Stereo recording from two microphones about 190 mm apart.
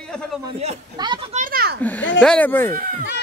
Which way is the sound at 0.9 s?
25° right (ahead or behind).